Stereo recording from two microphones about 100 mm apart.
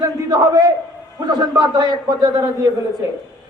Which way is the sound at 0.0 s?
45° right (ahead or behind).